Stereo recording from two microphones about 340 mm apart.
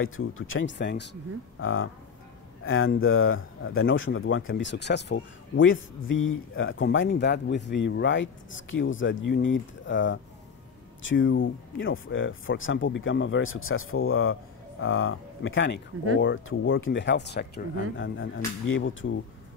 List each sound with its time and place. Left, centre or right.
0.0 s speech: left